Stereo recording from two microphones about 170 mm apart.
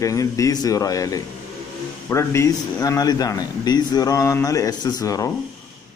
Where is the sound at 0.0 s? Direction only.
20° left (ahead or behind).